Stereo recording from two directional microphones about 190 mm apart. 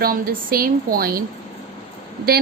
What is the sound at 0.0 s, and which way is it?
A woman's voice, 50° right (ahead or behind).